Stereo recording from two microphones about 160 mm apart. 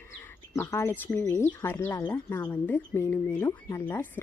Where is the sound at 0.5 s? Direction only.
15° left (ahead or behind).